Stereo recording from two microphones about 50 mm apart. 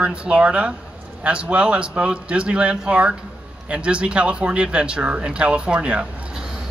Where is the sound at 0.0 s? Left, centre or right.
Right.